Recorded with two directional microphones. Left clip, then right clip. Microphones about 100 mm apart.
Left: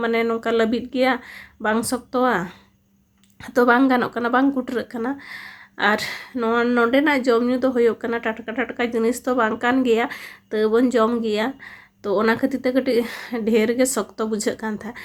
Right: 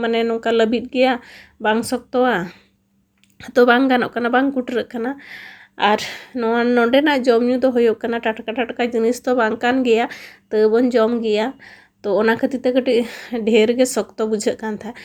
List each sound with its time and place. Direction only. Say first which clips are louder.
0.0 s speech: right 2 dB; 20° right (ahead or behind)
6.9 s speech: right 3 dB; 25° right (ahead or behind)